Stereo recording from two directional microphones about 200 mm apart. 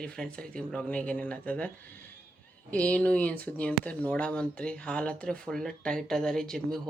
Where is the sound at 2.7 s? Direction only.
5° left (ahead or behind).